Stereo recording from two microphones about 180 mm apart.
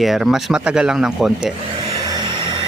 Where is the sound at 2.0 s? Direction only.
25° right (ahead or behind).